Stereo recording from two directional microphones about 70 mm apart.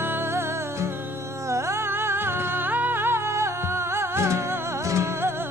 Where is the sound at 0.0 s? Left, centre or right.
Right.